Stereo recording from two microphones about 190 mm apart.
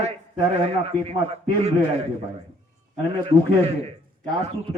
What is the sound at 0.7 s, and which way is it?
A man's voice, 35° right (ahead or behind).